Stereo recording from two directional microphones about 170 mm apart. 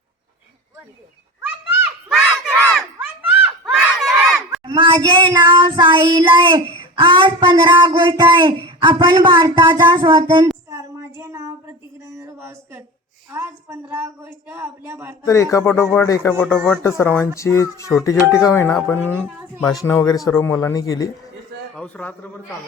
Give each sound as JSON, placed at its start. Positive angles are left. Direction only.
{"t": 2.0, "sound": "crowd", "side_deg": 0}
{"t": 3.0, "sound": "a sound", "side_deg": -5}
{"t": 4.6, "sound": "child singing", "side_deg": -30}
{"t": 12.0, "sound": "a sound", "side_deg": -15}
{"t": 13.3, "sound": "a woman's voice", "side_deg": -15}
{"t": 15.3, "sound": "speech", "side_deg": 20}
{"t": 18.9, "sound": "a woman's voice", "side_deg": -10}
{"t": 19.6, "sound": "speech", "side_deg": 20}
{"t": 21.8, "sound": "speech", "side_deg": 5}